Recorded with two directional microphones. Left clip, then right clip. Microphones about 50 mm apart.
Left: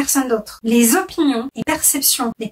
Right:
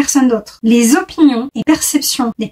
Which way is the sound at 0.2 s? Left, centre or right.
Right.